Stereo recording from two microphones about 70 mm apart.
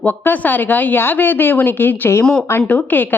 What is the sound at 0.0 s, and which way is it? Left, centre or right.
Speech, left.